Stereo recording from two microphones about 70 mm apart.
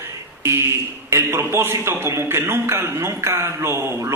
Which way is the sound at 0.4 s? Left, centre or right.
Right.